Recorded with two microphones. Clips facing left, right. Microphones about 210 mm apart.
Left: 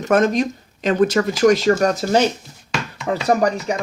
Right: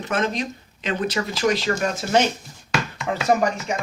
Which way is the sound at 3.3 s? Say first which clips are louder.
Left 3 dB; 35° left (ahead or behind).